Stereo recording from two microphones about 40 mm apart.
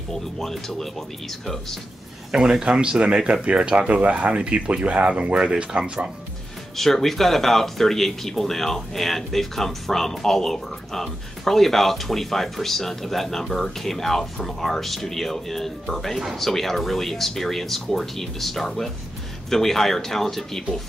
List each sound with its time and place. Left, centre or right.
0.1 s speech: centre
2.3 s speech: right
6.8 s speech: centre